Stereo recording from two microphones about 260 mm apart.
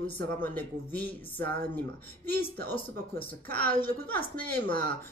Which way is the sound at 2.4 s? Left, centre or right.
Left.